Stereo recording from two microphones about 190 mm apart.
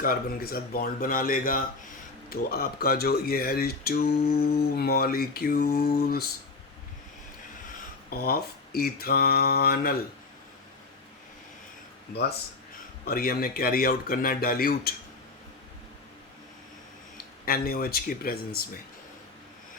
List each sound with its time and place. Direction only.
0.0 s mantra: 50° left (ahead or behind)
8.1 s mantra: 55° left (ahead or behind)
13.1 s mantra: 50° left (ahead or behind)
17.4 s mantra: 50° left (ahead or behind)